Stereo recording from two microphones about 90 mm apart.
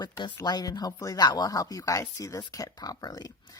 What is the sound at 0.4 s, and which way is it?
Speech, 45° left (ahead or behind).